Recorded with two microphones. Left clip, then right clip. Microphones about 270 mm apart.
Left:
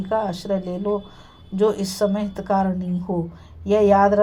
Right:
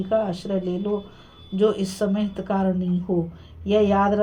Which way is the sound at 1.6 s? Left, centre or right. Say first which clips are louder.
Left 2 dB; left.